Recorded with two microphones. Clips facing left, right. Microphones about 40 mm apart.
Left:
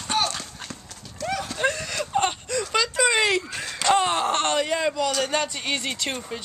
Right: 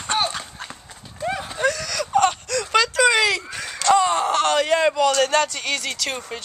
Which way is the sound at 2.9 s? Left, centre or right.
Right.